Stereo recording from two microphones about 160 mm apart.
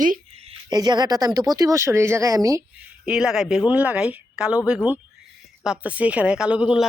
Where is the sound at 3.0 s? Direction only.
5° right (ahead or behind).